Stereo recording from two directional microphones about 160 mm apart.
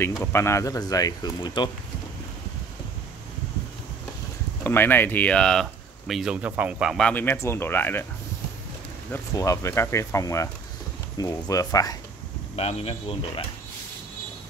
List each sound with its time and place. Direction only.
0.2 s speech: 15° left (ahead or behind)
4.6 s speech: 15° left (ahead or behind)
9.1 s speech: 20° left (ahead or behind)
12.5 s speech: 40° left (ahead or behind)